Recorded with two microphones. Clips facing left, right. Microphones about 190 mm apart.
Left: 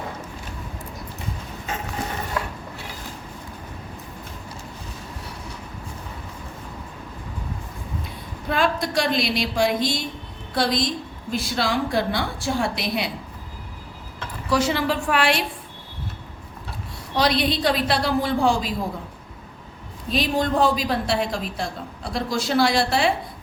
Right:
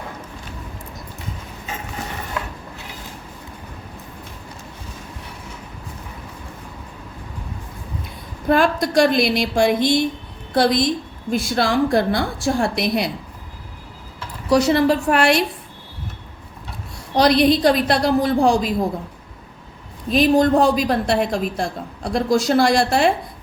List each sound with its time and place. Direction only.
8.4 s a woman's voice: 55° right (ahead or behind)
14.5 s a woman's voice: 40° right (ahead or behind)
17.2 s a woman's voice: 45° right (ahead or behind)
20.1 s a woman's voice: 50° right (ahead or behind)